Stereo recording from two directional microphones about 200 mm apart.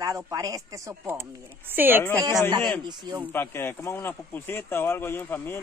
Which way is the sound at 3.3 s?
10° left (ahead or behind).